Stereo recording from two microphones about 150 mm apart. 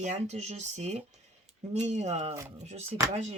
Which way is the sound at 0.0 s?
50° right (ahead or behind).